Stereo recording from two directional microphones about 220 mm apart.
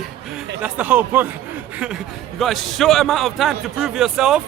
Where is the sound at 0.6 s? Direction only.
5° right (ahead or behind).